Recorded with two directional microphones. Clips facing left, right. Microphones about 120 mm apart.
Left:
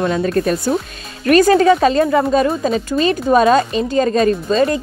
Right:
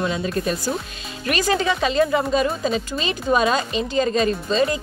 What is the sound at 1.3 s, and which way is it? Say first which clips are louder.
Speech: left 11 dB; 45° left (ahead or behind).